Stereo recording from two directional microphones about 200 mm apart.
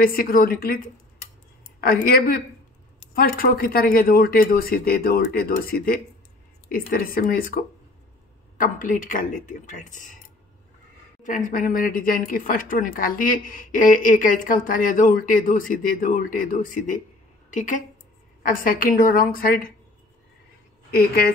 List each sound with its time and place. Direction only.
0.0 s speech: 45° left (ahead or behind)
1.8 s speech: 50° left (ahead or behind)
11.2 s a woman's voice: 40° left (ahead or behind)
20.9 s speech: 50° left (ahead or behind)